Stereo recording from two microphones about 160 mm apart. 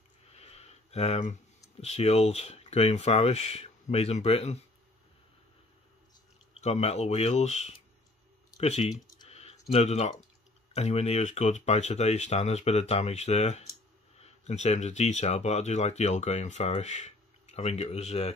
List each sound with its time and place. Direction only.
0.3 s a sound: 40° left (ahead or behind)
1.8 s speech: 40° left (ahead or behind)
6.5 s speech: 40° left (ahead or behind)
8.5 s typing: 40° left (ahead or behind)
10.7 s speech: 40° left (ahead or behind)